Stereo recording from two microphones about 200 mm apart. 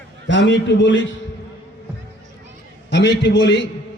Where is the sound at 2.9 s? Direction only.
60° left (ahead or behind).